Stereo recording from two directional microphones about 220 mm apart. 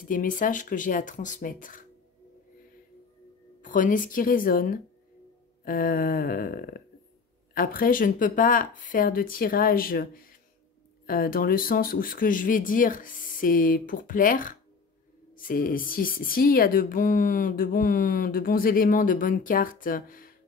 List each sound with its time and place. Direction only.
0.0 s speech: 40° left (ahead or behind)
3.6 s speech: 35° left (ahead or behind)